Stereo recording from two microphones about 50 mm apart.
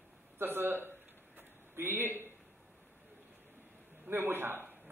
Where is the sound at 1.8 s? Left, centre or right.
Right.